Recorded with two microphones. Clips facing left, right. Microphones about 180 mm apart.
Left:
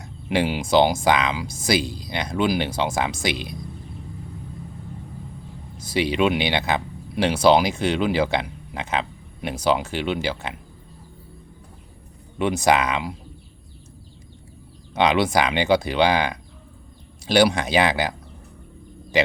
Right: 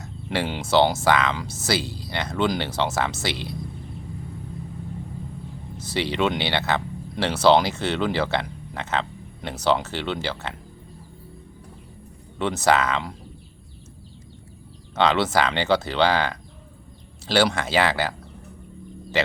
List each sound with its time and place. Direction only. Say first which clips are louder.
0.0 s speech: left 4 dB; 15° left (ahead or behind)
5.7 s speech: left 3 dB; 10° left (ahead or behind)
12.4 s speech: left 1 dB; 15° left (ahead or behind)
14.9 s speech: left 1 dB; 15° left (ahead or behind)
19.1 s speech: left 3 dB; 15° left (ahead or behind)